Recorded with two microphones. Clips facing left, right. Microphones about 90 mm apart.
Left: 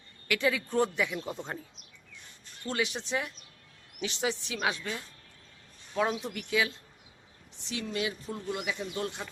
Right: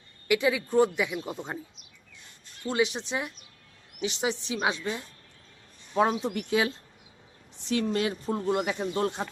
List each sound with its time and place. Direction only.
0.3 s speech: 15° right (ahead or behind)
2.6 s a woman's voice: 20° right (ahead or behind)
7.7 s speech: 45° right (ahead or behind)